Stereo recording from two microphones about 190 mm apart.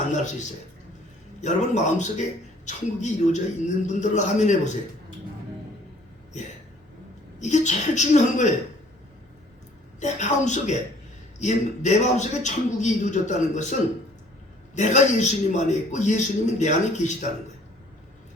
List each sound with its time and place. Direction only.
0.2 s a man's voice: 40° left (ahead or behind)
7.3 s a man's voice: 40° left (ahead or behind)
10.0 s a man's voice: 40° left (ahead or behind)
14.8 s a man's voice: 40° left (ahead or behind)